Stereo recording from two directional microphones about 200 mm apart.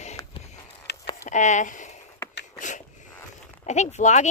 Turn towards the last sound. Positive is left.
turn(degrees=35)  # may be behind; listen again after turning